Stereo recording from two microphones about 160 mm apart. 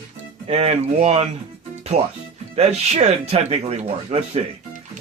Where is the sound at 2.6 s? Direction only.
40° right (ahead or behind).